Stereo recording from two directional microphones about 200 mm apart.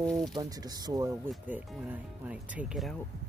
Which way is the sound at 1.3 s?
5° right (ahead or behind).